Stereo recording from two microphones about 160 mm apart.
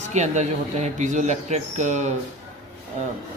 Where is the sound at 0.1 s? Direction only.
45° right (ahead or behind).